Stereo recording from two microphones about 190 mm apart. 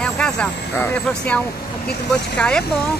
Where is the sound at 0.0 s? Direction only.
5° left (ahead or behind).